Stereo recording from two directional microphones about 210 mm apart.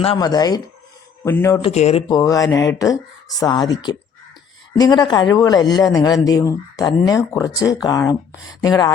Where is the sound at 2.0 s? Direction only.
15° left (ahead or behind).